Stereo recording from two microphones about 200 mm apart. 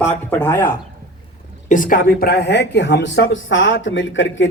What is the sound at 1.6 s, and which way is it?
A woman's voice, 40° left (ahead or behind).